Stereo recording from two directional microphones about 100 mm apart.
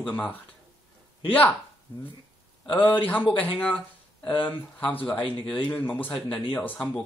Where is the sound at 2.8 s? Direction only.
15° left (ahead or behind).